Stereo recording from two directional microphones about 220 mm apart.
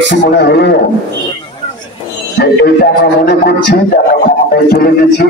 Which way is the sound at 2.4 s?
50° left (ahead or behind).